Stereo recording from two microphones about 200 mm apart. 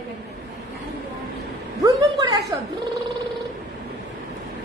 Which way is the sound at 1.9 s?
20° right (ahead or behind).